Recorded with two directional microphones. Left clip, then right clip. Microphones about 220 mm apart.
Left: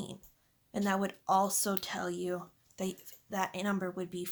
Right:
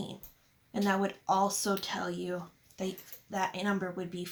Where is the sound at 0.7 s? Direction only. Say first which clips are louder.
Right 2 dB; 50° left (ahead or behind).